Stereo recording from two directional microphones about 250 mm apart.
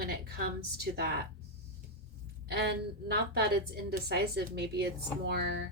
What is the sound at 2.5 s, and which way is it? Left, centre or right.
A woman's voice, right.